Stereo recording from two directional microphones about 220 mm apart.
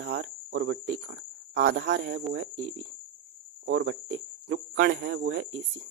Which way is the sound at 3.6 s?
60° right (ahead or behind).